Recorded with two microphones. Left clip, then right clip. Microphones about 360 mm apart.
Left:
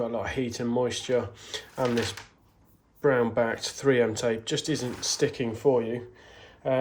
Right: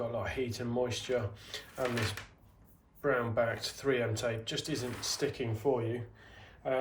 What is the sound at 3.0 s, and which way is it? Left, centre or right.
Speech, centre.